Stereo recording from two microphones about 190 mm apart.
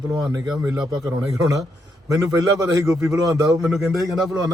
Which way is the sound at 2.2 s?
15° right (ahead or behind).